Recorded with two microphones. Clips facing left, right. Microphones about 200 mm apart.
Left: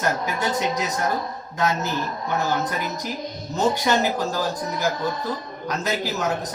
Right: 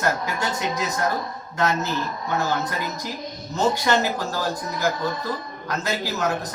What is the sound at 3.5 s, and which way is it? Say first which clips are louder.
Speech: even; 15° left (ahead or behind).